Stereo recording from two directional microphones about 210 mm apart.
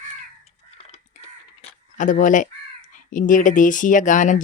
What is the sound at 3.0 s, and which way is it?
Speech, 40° left (ahead or behind).